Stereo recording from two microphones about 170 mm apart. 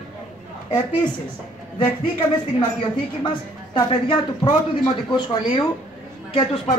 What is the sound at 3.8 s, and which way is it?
A woman's voice, 30° left (ahead or behind).